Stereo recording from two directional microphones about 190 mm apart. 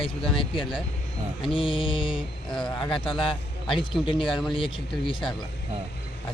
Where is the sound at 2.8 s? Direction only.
25° left (ahead or behind).